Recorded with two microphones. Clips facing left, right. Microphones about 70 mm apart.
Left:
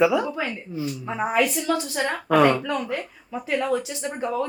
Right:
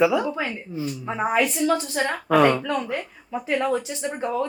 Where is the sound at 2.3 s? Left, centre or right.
Centre.